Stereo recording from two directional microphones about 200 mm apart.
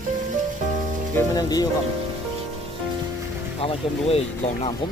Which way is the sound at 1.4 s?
20° left (ahead or behind).